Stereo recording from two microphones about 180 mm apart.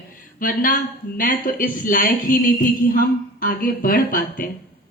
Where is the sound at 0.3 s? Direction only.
50° left (ahead or behind).